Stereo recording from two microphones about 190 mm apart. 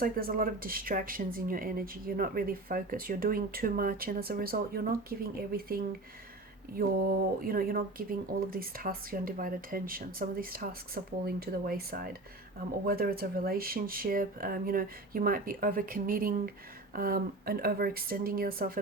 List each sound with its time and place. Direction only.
0.0 s speech: 50° right (ahead or behind)